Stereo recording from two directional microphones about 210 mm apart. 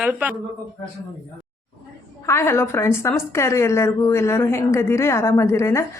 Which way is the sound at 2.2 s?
10° left (ahead or behind).